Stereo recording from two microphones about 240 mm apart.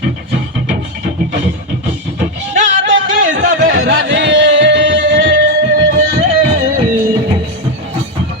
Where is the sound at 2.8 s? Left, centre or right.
Right.